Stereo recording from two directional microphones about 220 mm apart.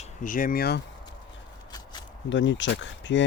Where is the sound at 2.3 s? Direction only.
60° left (ahead or behind).